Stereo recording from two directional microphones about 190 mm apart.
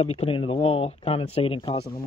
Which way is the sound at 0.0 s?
30° left (ahead or behind).